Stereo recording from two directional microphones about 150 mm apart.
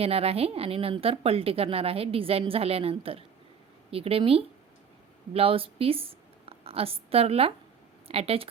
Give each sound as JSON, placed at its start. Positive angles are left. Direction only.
{"t": 0.0, "sound": "a woman's voice", "side_deg": -40}